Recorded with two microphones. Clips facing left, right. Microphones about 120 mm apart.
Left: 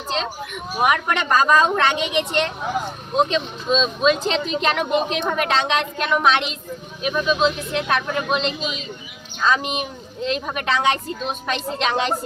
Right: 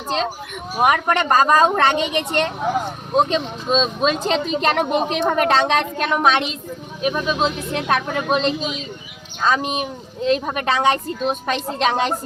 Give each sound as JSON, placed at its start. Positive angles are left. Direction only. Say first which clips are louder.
{"t": 0.8, "sound": "speech", "louder": "right 3 dB", "side_deg": -40}